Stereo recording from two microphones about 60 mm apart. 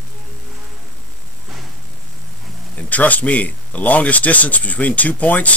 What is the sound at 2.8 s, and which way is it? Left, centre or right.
Speech, left.